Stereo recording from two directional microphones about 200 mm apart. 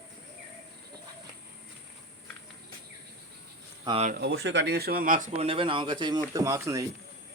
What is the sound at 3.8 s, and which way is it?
Speech, 30° right (ahead or behind).